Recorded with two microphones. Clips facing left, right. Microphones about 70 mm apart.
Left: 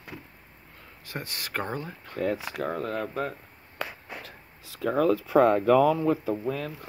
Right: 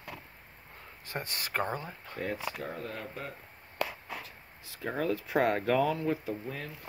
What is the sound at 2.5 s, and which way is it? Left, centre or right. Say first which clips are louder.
Speech: left 8 dB; left.